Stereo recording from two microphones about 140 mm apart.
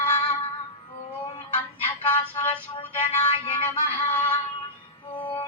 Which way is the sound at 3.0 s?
45° left (ahead or behind).